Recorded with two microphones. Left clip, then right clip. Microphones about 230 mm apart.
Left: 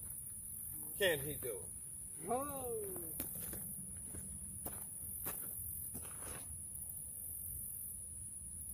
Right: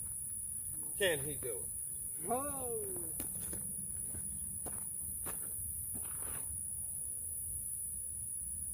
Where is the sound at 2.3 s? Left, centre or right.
Centre.